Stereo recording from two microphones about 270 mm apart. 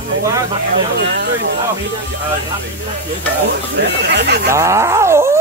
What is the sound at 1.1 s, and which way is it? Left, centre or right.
Speech, right.